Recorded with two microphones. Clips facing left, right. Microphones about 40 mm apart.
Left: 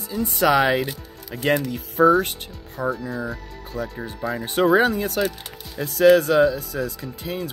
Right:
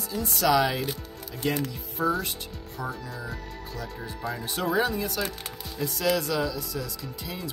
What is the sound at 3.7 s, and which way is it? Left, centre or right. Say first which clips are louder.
Speech: left 9 dB; left.